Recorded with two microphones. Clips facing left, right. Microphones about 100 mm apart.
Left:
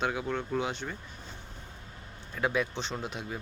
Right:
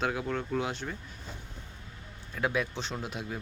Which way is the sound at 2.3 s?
Centre (ahead or behind).